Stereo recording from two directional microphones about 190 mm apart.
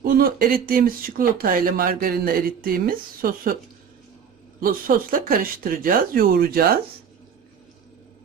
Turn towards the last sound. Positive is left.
turn(degrees=-50)  # may be behind; listen again after turning